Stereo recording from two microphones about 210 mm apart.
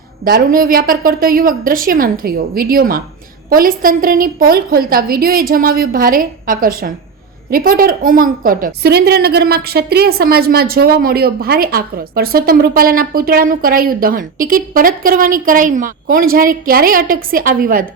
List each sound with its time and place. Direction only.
0.3 s a woman's voice: 45° right (ahead or behind)